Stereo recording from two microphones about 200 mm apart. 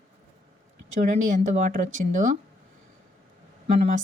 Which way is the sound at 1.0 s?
40° right (ahead or behind).